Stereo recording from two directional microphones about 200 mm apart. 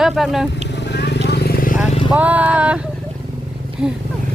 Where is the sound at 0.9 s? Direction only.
55° left (ahead or behind).